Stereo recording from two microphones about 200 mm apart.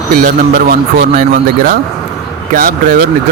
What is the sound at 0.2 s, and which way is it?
Speech, 45° right (ahead or behind).